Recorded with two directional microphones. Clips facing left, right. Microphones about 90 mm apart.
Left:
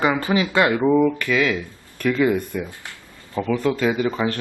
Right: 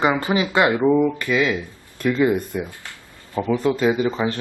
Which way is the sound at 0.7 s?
Centre (ahead or behind).